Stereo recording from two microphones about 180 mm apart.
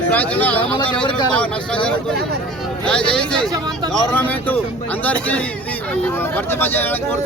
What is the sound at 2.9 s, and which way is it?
Speech, 5° left (ahead or behind).